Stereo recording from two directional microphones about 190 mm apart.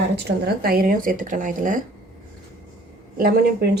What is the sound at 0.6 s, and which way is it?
Speech, 50° right (ahead or behind).